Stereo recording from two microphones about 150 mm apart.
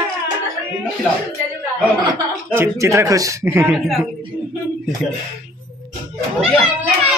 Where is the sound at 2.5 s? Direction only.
15° right (ahead or behind).